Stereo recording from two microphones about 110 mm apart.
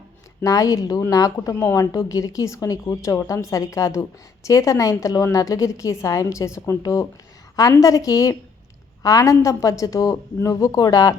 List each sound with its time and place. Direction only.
0.4 s a woman's voice: 30° left (ahead or behind)